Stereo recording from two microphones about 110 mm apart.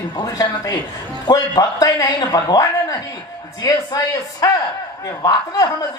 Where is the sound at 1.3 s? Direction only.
35° left (ahead or behind).